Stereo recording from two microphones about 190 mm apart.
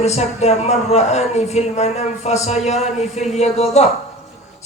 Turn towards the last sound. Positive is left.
turn(degrees=35)  # may be behind; listen again after turning